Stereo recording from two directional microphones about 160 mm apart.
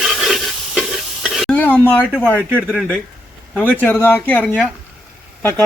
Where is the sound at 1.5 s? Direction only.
10° left (ahead or behind).